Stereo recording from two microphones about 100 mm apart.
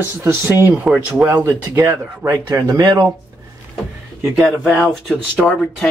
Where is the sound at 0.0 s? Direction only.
25° right (ahead or behind).